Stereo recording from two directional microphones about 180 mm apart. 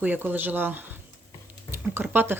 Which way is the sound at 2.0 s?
10° right (ahead or behind).